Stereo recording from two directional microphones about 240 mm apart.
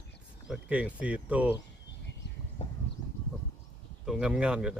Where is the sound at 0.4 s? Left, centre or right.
Centre.